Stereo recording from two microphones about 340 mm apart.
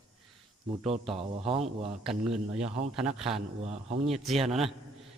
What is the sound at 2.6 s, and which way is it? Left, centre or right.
A man's voice, centre.